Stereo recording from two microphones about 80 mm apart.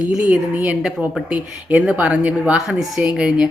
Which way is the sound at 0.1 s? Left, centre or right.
Centre.